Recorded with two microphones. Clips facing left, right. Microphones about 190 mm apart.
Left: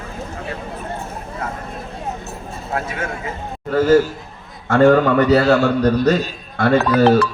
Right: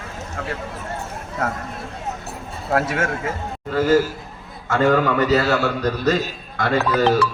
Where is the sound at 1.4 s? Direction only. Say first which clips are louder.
Right 4 dB; 75° right (ahead or behind).